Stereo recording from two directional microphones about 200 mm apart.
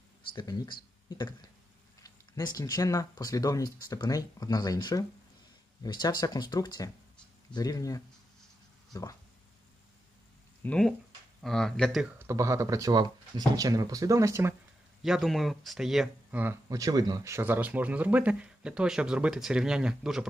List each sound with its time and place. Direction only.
0.3 s speech: 20° left (ahead or behind)
10.6 s speech: 5° left (ahead or behind)
12.3 s speech: 15° right (ahead or behind)
15.0 s speech: centre (ahead or behind)